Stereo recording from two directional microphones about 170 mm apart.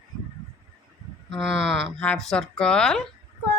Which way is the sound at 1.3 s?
Centre (ahead or behind).